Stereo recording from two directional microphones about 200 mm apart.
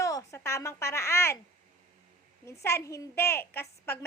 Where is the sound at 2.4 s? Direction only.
15° left (ahead or behind).